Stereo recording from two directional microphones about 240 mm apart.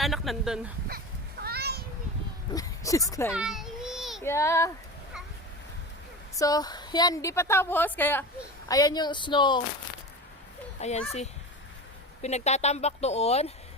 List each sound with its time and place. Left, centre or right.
0.0 s speech: centre
0.9 s children playing: right
2.6 s speech: centre
3.3 s a sound: centre
4.2 s a woman's voice: centre
6.3 s a woman's voice: centre
10.8 s speech: left